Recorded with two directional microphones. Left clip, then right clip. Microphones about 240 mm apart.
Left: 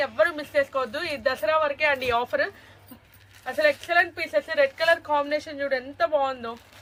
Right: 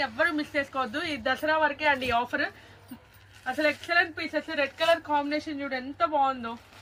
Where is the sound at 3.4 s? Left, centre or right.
Left.